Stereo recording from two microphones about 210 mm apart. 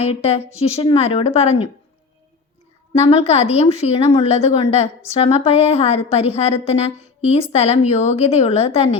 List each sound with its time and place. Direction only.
0.0 s a woman's voice: 30° left (ahead or behind)
2.9 s a woman's voice: 30° left (ahead or behind)